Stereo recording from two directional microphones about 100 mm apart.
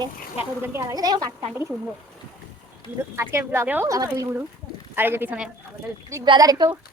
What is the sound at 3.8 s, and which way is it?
Speech, 35° right (ahead or behind).